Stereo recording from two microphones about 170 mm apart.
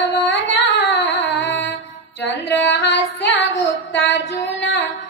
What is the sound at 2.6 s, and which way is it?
Female singing, 90° left.